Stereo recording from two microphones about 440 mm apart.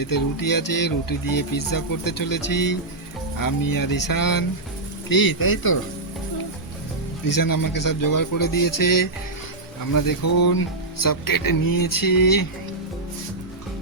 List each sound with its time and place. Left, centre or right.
0.0 s speech: left
7.3 s speech: left